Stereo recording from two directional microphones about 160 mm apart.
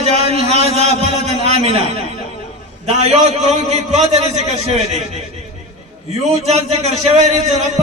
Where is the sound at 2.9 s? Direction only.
45° right (ahead or behind).